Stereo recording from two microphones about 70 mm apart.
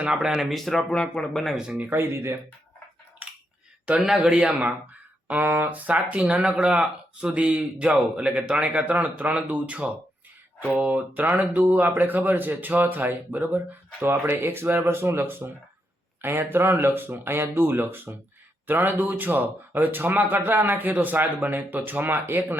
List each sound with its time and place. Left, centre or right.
0.0 s speech: centre
1.5 s speech: centre
1.9 s speech: right
3.8 s speech: centre
5.3 s speech: right